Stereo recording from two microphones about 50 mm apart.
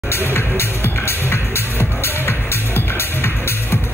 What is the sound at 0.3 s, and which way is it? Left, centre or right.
Music, left.